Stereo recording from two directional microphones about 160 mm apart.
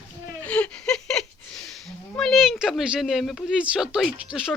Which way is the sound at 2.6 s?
5° right (ahead or behind).